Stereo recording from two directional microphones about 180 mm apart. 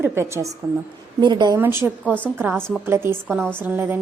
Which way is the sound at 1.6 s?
10° right (ahead or behind).